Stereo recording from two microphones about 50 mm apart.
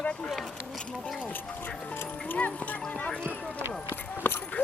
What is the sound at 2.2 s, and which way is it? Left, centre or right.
Music, left.